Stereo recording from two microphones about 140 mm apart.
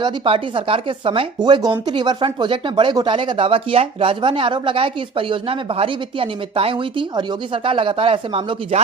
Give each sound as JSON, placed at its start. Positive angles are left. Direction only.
{"t": 0.0, "sound": "speech", "side_deg": -40}